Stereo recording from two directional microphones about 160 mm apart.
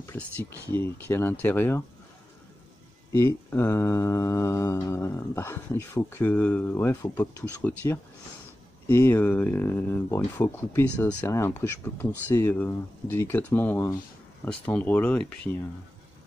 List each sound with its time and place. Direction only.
0.0 s mantra: 15° left (ahead or behind)
3.1 s mantra: 15° left (ahead or behind)